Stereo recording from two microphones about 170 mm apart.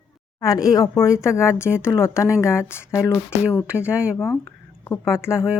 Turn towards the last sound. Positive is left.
turn(degrees=15)  # may be behind; listen again after turning